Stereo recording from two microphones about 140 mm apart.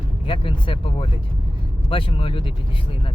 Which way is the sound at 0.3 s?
40° left (ahead or behind).